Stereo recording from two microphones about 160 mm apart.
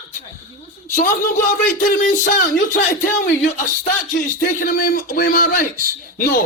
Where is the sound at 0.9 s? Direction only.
60° left (ahead or behind).